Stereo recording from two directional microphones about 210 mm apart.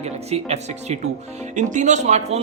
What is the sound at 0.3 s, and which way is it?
Speech, 30° right (ahead or behind).